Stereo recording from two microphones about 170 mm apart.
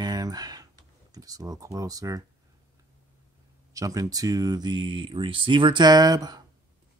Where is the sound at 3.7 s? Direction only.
20° right (ahead or behind).